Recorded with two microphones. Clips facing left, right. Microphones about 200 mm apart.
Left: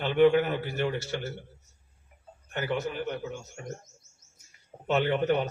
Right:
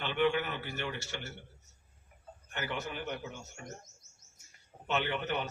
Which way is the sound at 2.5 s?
40° left (ahead or behind).